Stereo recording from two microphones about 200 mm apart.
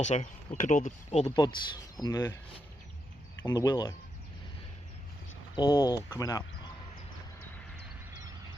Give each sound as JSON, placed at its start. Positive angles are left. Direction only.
{"t": 0.0, "sound": "speech", "side_deg": 35}
{"t": 1.4, "sound": "speech", "side_deg": 20}
{"t": 3.4, "sound": "speech", "side_deg": 20}
{"t": 5.5, "sound": "speech", "side_deg": 20}